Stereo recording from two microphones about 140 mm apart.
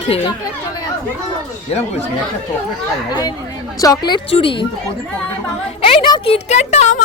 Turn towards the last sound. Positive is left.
turn(degrees=55)  # may be behind; listen again after turning